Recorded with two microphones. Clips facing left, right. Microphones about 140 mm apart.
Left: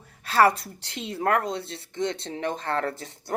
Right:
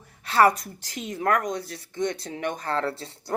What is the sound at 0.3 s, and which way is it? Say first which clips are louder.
Speech: even; 30° left (ahead or behind).